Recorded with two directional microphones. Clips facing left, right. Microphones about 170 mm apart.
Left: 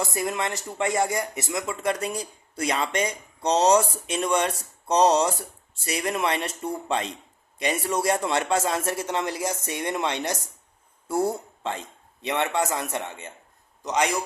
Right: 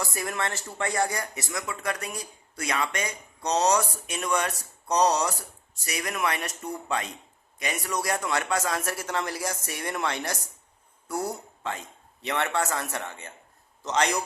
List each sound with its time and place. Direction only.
0.0 s a man's voice: 20° left (ahead or behind)